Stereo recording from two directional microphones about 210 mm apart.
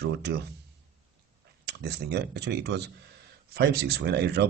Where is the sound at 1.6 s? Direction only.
50° right (ahead or behind).